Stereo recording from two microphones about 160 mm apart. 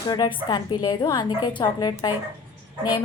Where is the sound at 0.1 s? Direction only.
30° left (ahead or behind).